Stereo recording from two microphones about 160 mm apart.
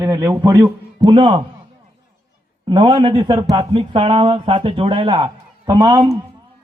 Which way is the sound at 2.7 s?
30° right (ahead or behind).